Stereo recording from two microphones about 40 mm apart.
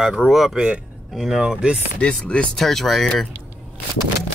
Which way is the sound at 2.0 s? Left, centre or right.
Left.